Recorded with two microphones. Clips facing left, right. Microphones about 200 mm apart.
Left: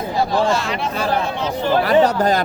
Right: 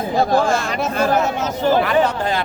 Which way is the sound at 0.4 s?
50° right (ahead or behind).